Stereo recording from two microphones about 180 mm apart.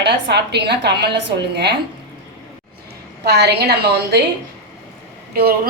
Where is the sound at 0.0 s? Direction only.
70° right (ahead or behind).